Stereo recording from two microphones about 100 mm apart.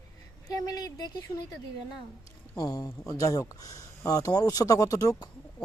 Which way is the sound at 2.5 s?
40° left (ahead or behind).